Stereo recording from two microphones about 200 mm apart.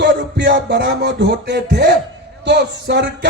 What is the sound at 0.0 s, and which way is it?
Music, 60° right (ahead or behind).